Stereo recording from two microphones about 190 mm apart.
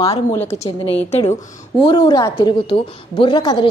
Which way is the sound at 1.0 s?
35° left (ahead or behind).